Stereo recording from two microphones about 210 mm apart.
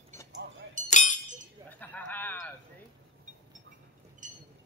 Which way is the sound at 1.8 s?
10° left (ahead or behind).